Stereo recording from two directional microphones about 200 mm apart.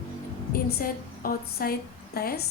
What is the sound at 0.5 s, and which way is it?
A woman's voice, 45° left (ahead or behind).